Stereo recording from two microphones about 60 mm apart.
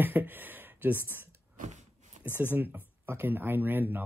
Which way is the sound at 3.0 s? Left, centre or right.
Right.